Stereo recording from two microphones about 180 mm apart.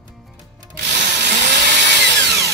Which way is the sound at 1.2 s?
70° right (ahead or behind).